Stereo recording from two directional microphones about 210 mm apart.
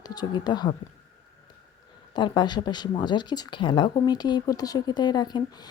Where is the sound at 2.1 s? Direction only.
20° left (ahead or behind).